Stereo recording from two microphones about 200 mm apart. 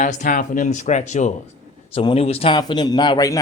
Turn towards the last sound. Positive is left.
turn(degrees=20)  # may be behind; listen again after turning